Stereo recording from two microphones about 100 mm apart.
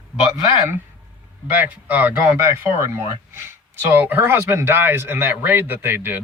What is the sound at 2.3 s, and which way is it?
Speech, 25° right (ahead or behind).